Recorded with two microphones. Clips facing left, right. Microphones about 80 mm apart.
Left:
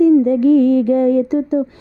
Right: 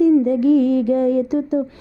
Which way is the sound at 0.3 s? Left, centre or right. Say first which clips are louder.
Left 3 dB; left.